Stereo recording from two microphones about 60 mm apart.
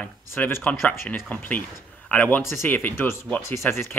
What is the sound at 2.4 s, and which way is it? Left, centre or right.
Speech, left.